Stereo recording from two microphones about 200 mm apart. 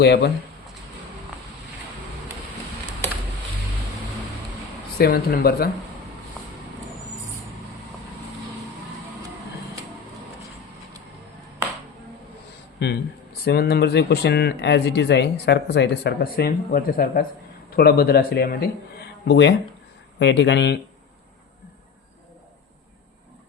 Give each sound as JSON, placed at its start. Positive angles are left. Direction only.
{"t": 0.0, "sound": "speech", "side_deg": 55}
{"t": 4.9, "sound": "speech", "side_deg": 50}
{"t": 12.8, "sound": "speech", "side_deg": 60}